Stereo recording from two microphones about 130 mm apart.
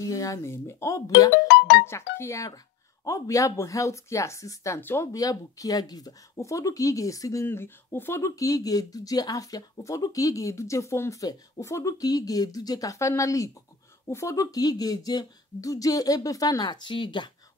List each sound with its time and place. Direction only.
0.0 s speech: 25° left (ahead or behind)